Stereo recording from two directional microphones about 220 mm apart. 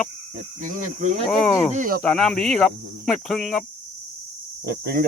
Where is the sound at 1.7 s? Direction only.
35° right (ahead or behind).